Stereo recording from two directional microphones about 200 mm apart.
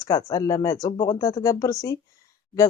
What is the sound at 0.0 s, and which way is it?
Speech, 20° left (ahead or behind).